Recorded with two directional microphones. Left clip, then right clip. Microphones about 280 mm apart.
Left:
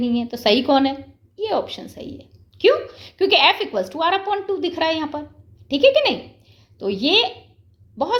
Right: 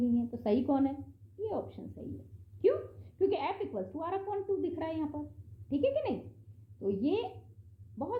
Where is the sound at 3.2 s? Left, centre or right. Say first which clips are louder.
Left 16 dB; left.